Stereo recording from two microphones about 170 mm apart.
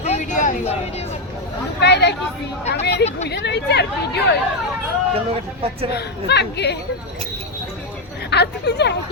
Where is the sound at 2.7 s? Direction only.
90° left.